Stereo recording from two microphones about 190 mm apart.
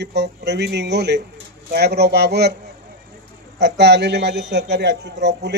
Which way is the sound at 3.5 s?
60° right (ahead or behind).